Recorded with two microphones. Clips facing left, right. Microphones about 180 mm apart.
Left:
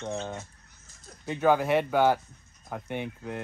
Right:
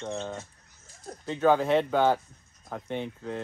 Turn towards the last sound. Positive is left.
turn(degrees=15)  # may be behind; listen again after turning